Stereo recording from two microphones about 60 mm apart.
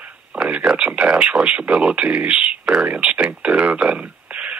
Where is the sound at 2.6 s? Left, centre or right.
Centre.